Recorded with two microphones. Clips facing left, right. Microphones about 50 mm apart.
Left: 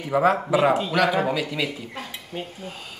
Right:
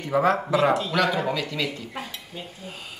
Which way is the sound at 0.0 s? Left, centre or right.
Centre.